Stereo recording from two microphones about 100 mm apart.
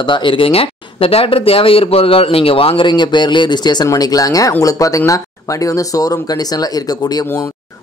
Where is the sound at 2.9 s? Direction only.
50° left (ahead or behind).